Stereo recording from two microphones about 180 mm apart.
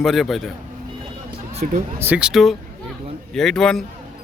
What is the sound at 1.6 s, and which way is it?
Speech, 40° right (ahead or behind).